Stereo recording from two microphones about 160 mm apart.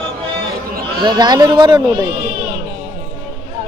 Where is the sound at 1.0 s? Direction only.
25° right (ahead or behind).